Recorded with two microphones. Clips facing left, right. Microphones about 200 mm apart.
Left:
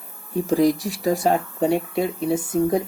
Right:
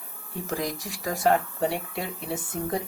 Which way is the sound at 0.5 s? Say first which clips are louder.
Left 13 dB; 20° left (ahead or behind).